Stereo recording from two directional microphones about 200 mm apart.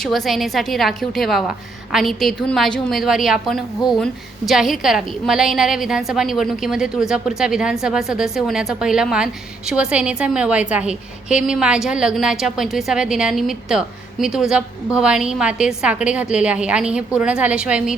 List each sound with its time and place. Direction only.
0.0 s a woman's voice: centre (ahead or behind)